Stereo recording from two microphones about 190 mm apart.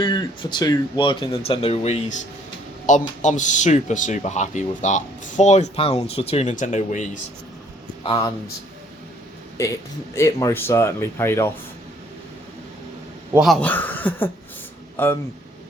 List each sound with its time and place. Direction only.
0.0 s speech: 25° left (ahead or behind); by 7.2 s 40° left (ahead or behind)
8.0 s speech: 20° left (ahead or behind)
9.6 s speech: 15° left (ahead or behind)
13.3 s speech: centre (ahead or behind)